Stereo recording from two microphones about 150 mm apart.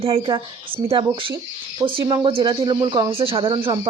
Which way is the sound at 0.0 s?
35° right (ahead or behind).